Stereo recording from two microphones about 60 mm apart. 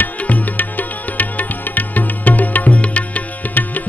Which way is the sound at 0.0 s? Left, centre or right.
Left.